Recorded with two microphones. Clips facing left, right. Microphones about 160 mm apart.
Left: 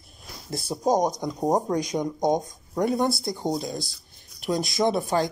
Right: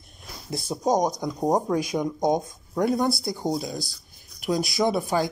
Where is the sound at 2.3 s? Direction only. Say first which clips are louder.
Even; 15° left (ahead or behind).